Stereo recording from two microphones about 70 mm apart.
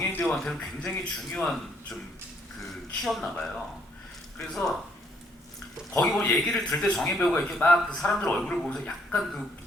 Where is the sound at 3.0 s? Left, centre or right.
Centre.